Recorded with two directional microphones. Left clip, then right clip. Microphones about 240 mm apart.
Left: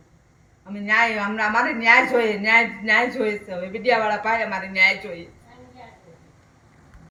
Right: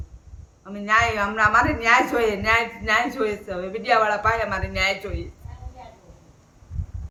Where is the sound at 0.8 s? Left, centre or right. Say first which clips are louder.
Even; centre.